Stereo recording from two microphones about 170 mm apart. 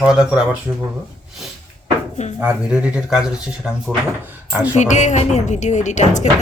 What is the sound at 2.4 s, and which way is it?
Speech, 5° right (ahead or behind).